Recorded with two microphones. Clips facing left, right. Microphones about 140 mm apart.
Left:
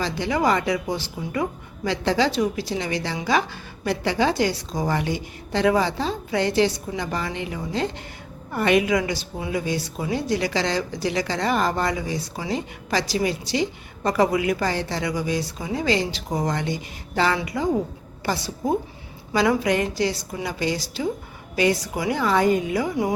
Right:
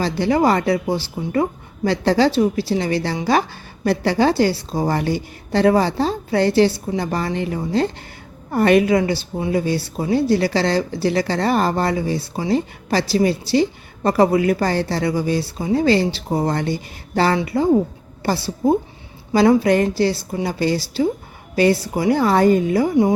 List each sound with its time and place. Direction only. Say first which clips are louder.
0.0 s a woman's voice: right 5 dB; 35° right (ahead or behind)